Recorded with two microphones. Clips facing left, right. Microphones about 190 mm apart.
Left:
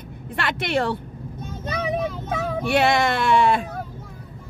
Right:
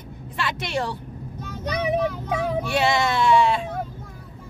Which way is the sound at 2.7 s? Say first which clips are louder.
Left 4 dB; 55° left (ahead or behind).